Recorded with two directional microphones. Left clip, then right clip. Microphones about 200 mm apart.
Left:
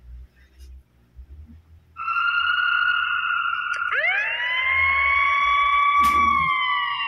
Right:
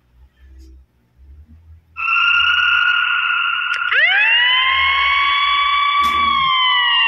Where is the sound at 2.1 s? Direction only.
30° right (ahead or behind).